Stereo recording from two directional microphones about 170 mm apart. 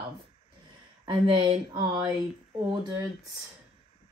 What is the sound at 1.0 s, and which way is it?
Speech, 25° right (ahead or behind).